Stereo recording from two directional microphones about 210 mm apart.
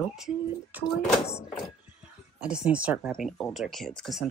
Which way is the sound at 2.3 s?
5° right (ahead or behind).